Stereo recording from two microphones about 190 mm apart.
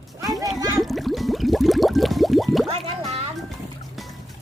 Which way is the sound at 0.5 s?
20° right (ahead or behind).